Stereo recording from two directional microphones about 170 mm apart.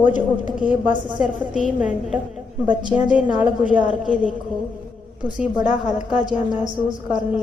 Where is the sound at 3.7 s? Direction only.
5° right (ahead or behind).